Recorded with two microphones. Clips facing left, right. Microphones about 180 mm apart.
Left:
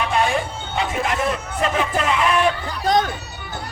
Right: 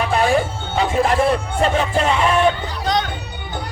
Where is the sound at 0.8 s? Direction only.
30° right (ahead or behind).